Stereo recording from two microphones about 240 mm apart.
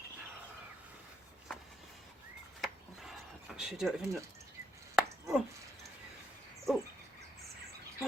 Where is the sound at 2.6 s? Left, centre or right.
Centre.